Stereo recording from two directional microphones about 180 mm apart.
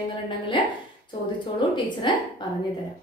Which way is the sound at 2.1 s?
25° left (ahead or behind).